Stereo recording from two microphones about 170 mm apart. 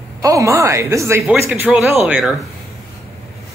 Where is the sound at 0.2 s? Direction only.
20° right (ahead or behind); by 2.4 s 5° right (ahead or behind).